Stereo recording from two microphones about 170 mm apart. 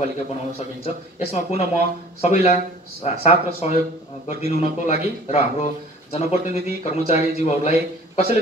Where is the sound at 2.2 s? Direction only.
45° left (ahead or behind).